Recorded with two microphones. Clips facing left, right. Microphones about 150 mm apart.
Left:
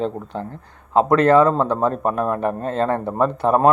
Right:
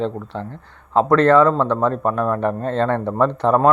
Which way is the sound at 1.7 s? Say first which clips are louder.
Right 1 dB; 40° left (ahead or behind).